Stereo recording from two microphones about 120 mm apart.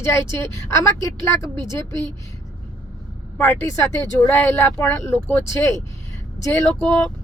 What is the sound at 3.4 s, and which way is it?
Speech, 15° left (ahead or behind).